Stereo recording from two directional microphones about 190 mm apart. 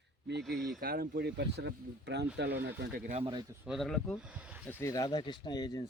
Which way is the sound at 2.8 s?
50° right (ahead or behind).